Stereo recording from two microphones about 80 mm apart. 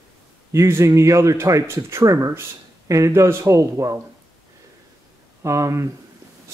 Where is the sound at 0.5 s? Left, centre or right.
Right.